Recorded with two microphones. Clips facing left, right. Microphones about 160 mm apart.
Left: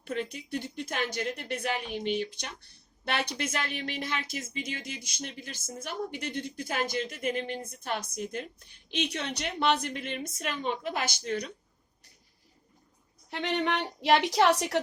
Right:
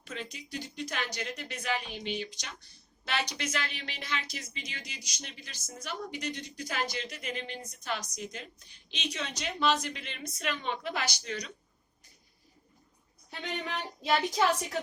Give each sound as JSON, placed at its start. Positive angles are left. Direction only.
{"t": 0.0, "sound": "a woman's voice", "side_deg": 60}
{"t": 13.3, "sound": "a woman's voice", "side_deg": 70}